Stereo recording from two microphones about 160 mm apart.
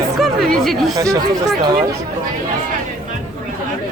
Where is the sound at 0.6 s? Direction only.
Centre (ahead or behind).